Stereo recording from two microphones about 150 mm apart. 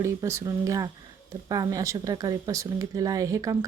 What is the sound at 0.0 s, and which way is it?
Speech, 20° right (ahead or behind).